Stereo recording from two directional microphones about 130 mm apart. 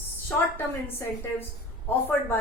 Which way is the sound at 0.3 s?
15° left (ahead or behind).